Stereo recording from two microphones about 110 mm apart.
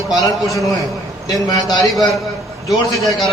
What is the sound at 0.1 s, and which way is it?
A man's voice, 30° left (ahead or behind).